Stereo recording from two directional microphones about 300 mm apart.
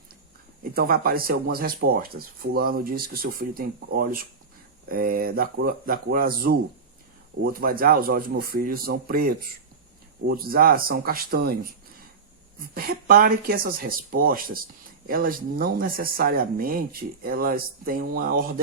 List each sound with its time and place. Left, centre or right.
0.6 s speech: right